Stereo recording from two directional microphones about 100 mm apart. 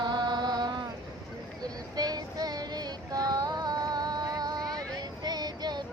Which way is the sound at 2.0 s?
40° right (ahead or behind).